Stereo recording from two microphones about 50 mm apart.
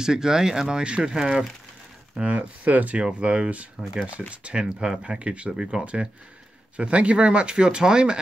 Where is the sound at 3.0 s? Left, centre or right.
Centre.